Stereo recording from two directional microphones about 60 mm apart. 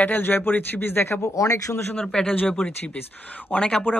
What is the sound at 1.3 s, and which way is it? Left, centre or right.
Speech, left.